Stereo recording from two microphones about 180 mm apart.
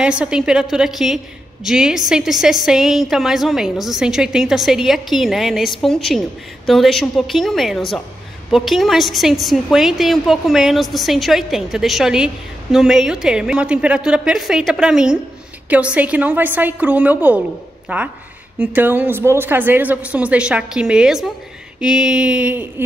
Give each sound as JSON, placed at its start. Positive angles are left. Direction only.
{"t": 0.0, "sound": "a woman's voice", "side_deg": -5}